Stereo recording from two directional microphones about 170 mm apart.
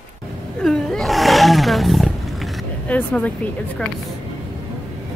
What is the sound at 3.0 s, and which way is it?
Speech, 10° left (ahead or behind).